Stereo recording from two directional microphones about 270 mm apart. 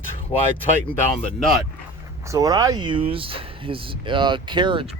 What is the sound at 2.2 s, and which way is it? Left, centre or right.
Speech, centre.